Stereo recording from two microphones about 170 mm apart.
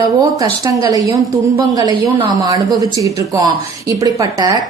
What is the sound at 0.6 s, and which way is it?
A woman's voice, 20° right (ahead or behind).